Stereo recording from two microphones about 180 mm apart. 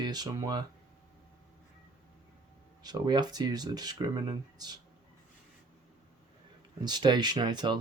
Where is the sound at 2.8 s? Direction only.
25° right (ahead or behind).